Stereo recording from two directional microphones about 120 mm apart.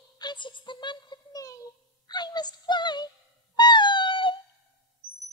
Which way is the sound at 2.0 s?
35° left (ahead or behind).